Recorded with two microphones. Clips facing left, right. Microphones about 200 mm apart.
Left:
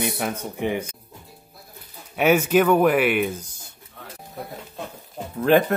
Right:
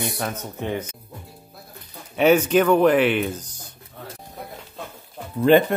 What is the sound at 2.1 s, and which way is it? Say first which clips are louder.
Speech: right 1 dB; 10° left (ahead or behind).